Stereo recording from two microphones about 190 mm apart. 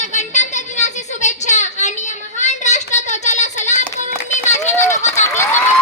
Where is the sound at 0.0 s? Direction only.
40° left (ahead or behind).